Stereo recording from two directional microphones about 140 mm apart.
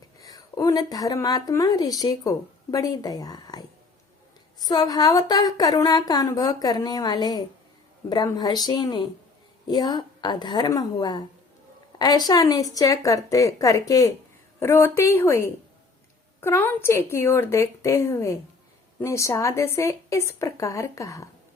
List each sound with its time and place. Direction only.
0.2 s a woman's voice: 25° left (ahead or behind)
4.6 s a woman's voice: 30° left (ahead or behind)